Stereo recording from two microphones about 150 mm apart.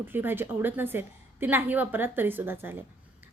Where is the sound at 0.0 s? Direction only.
15° right (ahead or behind).